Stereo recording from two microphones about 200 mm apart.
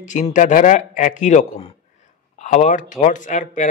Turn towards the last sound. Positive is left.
turn(degrees=40)  # may be behind; listen again after turning